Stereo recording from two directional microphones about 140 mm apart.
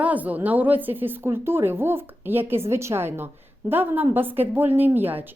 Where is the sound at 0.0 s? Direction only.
10° right (ahead or behind).